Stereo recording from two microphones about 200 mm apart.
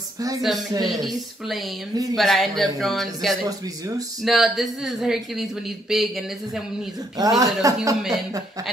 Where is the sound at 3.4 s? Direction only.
20° right (ahead or behind).